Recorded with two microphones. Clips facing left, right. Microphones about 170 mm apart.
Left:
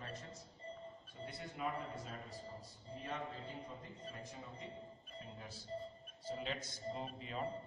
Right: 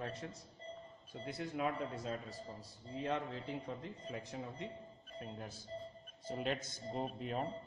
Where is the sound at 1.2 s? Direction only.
90° right.